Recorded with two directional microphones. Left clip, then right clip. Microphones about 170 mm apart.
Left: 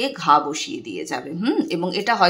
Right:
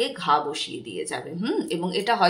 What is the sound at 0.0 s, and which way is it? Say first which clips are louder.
Speech: left 5 dB; 35° left (ahead or behind).